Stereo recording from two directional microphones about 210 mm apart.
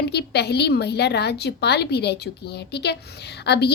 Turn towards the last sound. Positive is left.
turn(degrees=50)  # may be behind; listen again after turning